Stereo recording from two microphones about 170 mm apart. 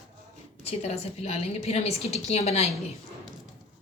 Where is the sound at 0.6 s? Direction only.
40° left (ahead or behind).